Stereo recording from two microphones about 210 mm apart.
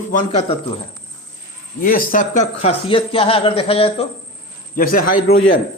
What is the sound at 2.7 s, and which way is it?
A man's voice, 25° left (ahead or behind).